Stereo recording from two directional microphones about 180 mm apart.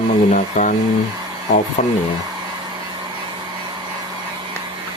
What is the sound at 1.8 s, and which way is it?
Speech, 45° left (ahead or behind).